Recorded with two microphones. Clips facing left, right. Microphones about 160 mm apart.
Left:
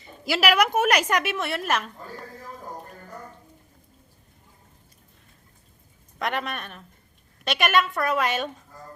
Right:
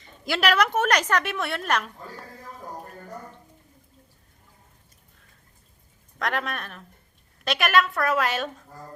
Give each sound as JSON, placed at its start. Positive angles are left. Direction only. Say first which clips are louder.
{"t": 0.0, "sound": "a woman's voice", "louder": "left 1 dB", "side_deg": 5}
{"t": 6.1, "sound": "a woman's voice", "louder": "even", "side_deg": 0}